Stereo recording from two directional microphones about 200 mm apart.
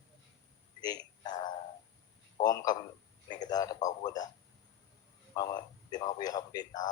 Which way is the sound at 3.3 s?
20° left (ahead or behind).